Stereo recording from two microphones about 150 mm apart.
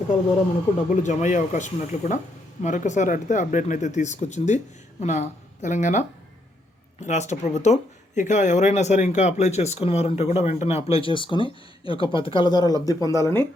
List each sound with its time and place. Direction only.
1.0 s speech: 55° left (ahead or behind); by 13.5 s 15° left (ahead or behind)